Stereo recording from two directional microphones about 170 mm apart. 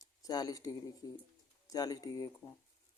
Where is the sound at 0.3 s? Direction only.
20° left (ahead or behind).